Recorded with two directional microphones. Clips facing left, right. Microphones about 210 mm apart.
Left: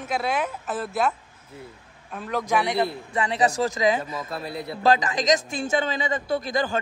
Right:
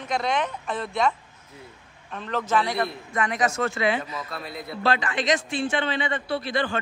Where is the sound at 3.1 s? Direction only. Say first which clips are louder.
Left 1 dB; 30° left (ahead or behind).